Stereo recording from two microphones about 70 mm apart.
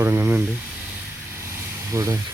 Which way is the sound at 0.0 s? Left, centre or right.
Right.